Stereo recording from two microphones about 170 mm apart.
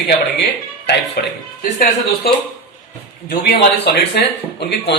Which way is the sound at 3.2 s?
65° left (ahead or behind).